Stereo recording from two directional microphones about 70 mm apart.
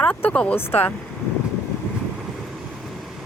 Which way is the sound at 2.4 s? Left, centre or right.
Centre.